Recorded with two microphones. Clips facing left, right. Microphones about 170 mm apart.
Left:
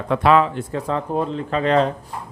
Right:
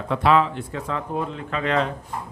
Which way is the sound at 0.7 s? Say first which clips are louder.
Left 5 dB; 35° left (ahead or behind).